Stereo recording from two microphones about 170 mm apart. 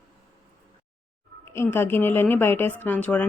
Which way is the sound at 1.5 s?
15° left (ahead or behind).